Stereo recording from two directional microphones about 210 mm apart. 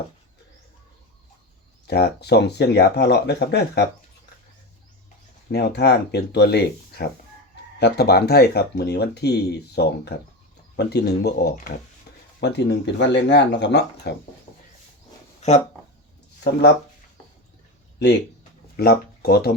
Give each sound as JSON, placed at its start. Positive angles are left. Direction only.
{"t": 1.9, "sound": "speech", "side_deg": 50}
{"t": 5.5, "sound": "speech", "side_deg": 50}
{"t": 15.4, "sound": "speech", "side_deg": 30}
{"t": 18.8, "sound": "speech", "side_deg": 50}